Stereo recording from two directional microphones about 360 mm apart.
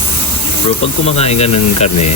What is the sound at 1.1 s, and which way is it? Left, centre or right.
Speech, centre.